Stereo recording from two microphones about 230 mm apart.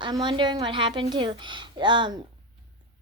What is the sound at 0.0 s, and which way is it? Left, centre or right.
A child's voice, centre.